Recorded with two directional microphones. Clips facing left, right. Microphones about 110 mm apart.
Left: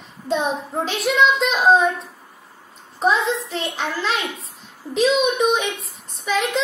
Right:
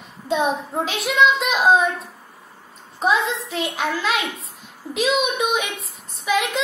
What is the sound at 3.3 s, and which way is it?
Speech, 40° left (ahead or behind).